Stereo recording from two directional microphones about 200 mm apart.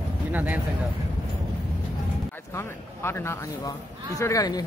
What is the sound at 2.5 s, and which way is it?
Speech, 10° left (ahead or behind).